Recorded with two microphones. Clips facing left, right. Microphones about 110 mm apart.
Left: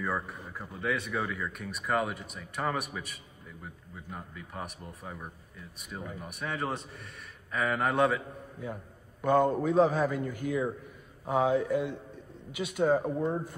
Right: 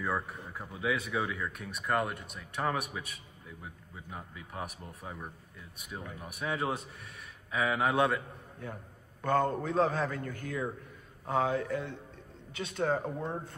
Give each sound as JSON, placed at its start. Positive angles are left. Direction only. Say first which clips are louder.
{"t": 0.0, "sound": "a man's voice", "louder": "left 1 dB", "side_deg": 0}
{"t": 9.2, "sound": "a man's voice", "louder": "left 4 dB", "side_deg": 10}